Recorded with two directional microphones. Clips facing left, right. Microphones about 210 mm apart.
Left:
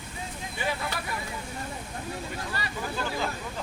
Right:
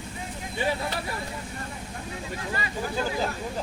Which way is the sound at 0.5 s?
30° right (ahead or behind).